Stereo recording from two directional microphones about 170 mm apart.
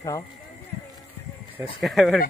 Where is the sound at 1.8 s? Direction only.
Centre (ahead or behind).